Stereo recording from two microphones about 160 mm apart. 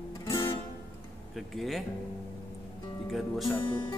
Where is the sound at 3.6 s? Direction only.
30° left (ahead or behind).